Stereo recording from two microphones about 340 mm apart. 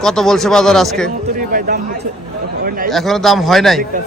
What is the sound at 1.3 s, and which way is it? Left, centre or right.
Speech, right.